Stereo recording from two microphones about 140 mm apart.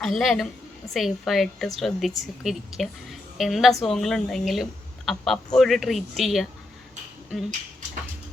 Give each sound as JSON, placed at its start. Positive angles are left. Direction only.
{"t": 0.0, "sound": "a woman's voice", "side_deg": 0}